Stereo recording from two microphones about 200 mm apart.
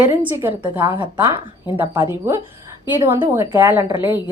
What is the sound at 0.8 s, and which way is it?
Speech, 25° right (ahead or behind).